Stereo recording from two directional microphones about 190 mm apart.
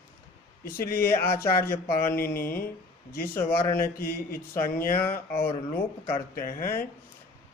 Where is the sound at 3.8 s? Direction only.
50° left (ahead or behind).